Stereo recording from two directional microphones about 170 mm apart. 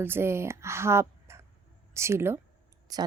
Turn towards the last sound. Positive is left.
turn(degrees=-20)  # may be behind; listen again after turning